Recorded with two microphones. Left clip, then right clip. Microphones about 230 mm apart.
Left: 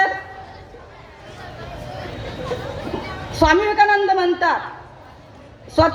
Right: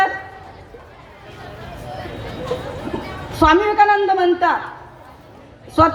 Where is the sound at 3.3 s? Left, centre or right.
Left.